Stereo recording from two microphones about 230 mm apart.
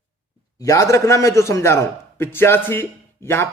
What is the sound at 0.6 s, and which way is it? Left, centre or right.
A man's voice, centre.